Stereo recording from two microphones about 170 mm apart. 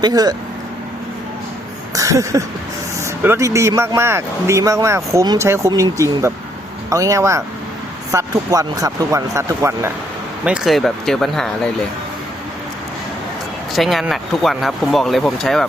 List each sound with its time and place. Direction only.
0.0 s speech: 20° right (ahead or behind)
1.9 s a sound: 20° right (ahead or behind)
3.0 s speech: 15° right (ahead or behind)
10.4 s speech: 5° right (ahead or behind)
13.7 s speech: centre (ahead or behind)